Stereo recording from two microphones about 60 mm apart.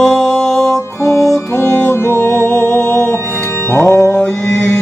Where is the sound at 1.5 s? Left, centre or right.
Left.